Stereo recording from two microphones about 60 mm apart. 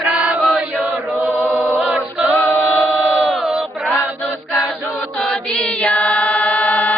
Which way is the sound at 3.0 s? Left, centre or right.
Centre.